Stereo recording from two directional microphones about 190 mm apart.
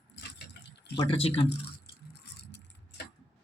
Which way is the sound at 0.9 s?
30° left (ahead or behind).